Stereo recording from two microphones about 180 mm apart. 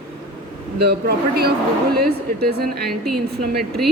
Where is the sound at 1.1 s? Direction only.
60° right (ahead or behind).